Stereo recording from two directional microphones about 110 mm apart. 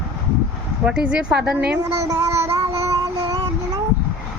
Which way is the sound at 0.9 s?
10° right (ahead or behind).